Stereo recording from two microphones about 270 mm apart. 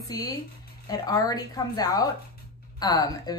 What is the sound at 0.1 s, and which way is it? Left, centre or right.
Speech, centre.